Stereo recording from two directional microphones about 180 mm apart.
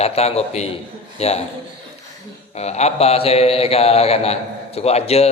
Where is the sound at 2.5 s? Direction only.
35° left (ahead or behind).